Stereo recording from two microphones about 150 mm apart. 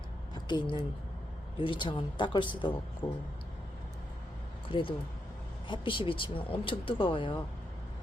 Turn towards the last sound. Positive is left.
turn(degrees=35)  # may be behind; listen again after turning